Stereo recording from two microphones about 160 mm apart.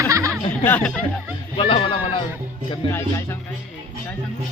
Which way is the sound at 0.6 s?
10° left (ahead or behind).